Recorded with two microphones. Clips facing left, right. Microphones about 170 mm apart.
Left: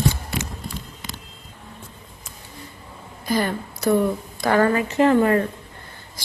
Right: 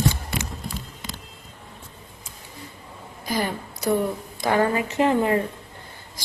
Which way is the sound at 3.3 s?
15° right (ahead or behind).